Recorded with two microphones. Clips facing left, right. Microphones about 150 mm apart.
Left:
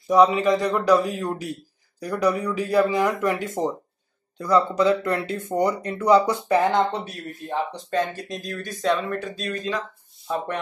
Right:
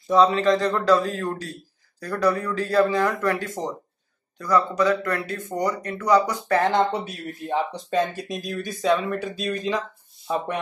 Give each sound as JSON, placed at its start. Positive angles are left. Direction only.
{"t": 0.1, "sound": "speech", "side_deg": 15}
{"t": 6.6, "sound": "speech", "side_deg": 0}
{"t": 10.2, "sound": "speech", "side_deg": -15}